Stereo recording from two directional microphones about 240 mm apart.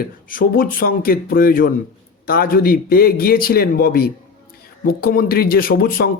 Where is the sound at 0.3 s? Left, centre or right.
Left.